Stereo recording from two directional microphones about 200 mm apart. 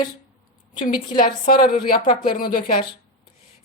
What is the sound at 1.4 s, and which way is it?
A woman's voice, 45° left (ahead or behind).